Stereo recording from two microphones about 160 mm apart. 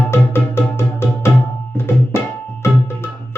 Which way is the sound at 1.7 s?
15° left (ahead or behind).